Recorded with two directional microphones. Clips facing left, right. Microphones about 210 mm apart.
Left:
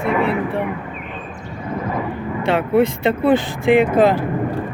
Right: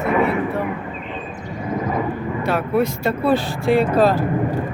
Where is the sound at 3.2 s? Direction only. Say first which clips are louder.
Left 2 dB; 20° left (ahead or behind).